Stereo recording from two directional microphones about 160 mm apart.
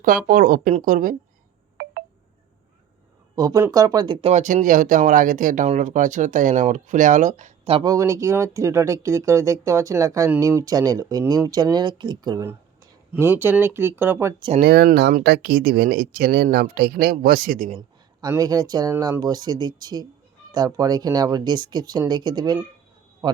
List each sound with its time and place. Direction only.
0.3 s speech: 60° right (ahead or behind)
1.8 s telephone dialing: 90° right
3.3 s speech: 20° right (ahead or behind)
4.3 s speech: 50° right (ahead or behind)
7.9 s speech: 20° right (ahead or behind)
14.6 s speech: 85° right; by 17.7 s 65° right (ahead or behind)
17.7 s a man's voice: 30° right (ahead or behind)